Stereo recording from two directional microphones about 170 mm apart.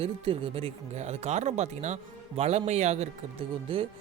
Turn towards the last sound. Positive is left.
turn(degrees=-30)  # may be behind; listen again after turning